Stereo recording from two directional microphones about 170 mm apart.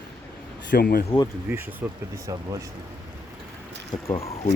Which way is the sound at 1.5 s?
10° right (ahead or behind).